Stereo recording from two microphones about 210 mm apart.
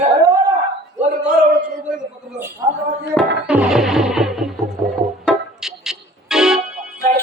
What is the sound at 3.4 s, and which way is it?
Music, 5° right (ahead or behind).